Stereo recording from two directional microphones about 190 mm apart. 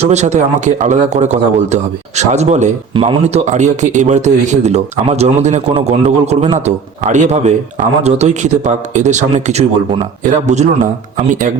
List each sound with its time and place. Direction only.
0.1 s speech: 35° right (ahead or behind)